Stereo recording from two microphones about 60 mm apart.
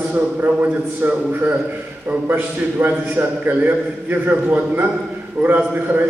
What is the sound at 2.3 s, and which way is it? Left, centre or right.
A man's voice, right.